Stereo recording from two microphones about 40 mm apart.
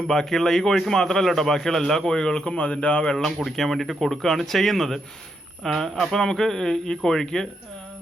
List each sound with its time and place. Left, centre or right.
0.1 s a man's voice: centre; by 3.0 s left
3.0 s a man's voice: centre
3.2 s a man's voice: centre